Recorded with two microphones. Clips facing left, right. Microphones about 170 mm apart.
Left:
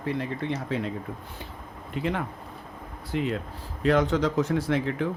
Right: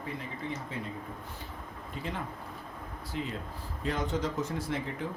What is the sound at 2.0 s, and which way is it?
Speech, 70° left (ahead or behind).